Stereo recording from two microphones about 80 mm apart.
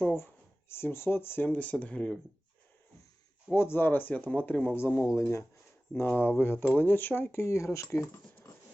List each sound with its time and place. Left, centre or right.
0.7 s speech: left
3.5 s speech: left
5.1 s speech: left
6.1 s speech: left